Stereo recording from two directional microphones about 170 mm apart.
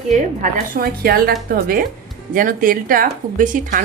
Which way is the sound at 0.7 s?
60° right (ahead or behind).